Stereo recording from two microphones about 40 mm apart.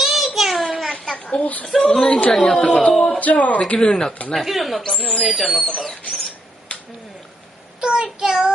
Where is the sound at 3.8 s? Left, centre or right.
Centre.